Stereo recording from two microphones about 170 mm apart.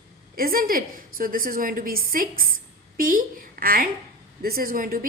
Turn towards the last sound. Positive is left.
turn(degrees=-55)  # may be behind; listen again after turning